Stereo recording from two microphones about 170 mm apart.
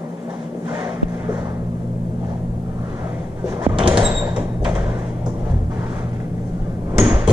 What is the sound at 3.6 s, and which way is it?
Sliding door, 30° right (ahead or behind).